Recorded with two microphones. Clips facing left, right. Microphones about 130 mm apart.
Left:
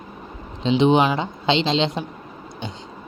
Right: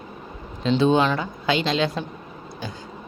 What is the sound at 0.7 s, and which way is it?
Speech, 20° left (ahead or behind).